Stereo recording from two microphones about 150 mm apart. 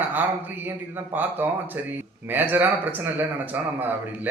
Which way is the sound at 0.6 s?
10° right (ahead or behind).